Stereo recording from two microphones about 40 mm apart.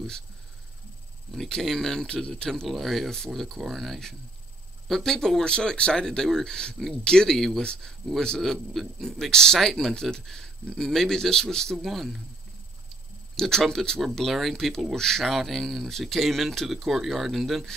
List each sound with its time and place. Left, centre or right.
1.3 s a man's voice: centre
2.7 s a man's voice: centre
5.4 s speech: left
6.0 s a man's voice: centre
7.6 s speech: left
8.4 s a man's voice: centre
13.4 s a man's voice: centre
14.0 s a man's voice: centre
15.2 s speech: centre